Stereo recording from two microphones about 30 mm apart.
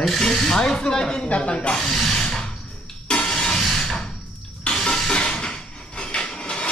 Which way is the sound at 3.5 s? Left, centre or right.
Centre.